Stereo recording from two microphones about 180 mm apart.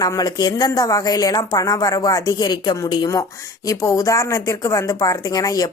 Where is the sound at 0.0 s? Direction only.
20° left (ahead or behind).